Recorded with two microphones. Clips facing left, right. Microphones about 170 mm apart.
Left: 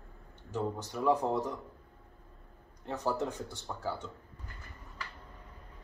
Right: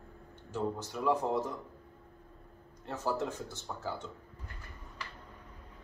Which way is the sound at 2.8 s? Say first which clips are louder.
Left 1 dB; 15° left (ahead or behind).